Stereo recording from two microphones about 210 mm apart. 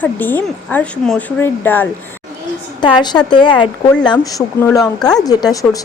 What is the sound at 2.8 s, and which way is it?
A woman's voice, 20° left (ahead or behind).